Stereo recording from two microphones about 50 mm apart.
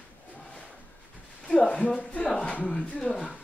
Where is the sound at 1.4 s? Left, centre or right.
Centre.